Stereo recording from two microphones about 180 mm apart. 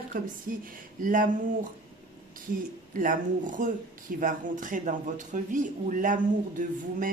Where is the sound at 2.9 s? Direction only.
50° right (ahead or behind).